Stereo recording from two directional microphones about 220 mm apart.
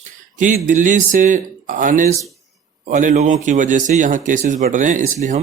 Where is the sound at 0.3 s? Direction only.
35° right (ahead or behind).